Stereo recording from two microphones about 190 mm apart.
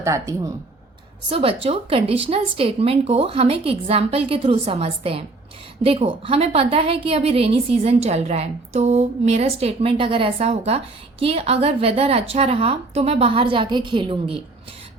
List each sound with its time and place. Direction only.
0.0 s speech: 15° right (ahead or behind)
1.3 s a woman's voice: 30° right (ahead or behind)